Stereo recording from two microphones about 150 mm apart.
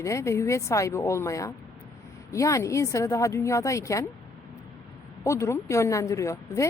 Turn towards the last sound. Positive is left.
turn(degrees=20)  # may be behind; listen again after turning